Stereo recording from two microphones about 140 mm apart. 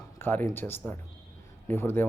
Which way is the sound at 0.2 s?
15° left (ahead or behind).